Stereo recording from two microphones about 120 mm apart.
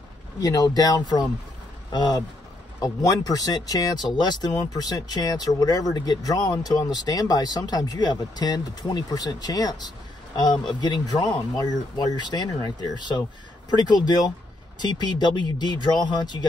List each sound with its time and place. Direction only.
0.4 s speech: 30° left (ahead or behind)